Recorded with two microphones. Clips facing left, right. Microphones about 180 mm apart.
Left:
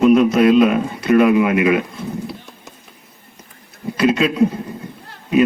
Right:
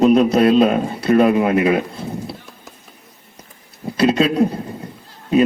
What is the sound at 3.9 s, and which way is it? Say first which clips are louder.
Speech: right 1 dB; 35° right (ahead or behind).